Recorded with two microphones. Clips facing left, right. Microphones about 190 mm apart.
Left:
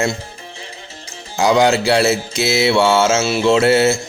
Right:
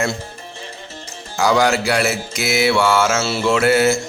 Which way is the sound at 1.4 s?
20° left (ahead or behind).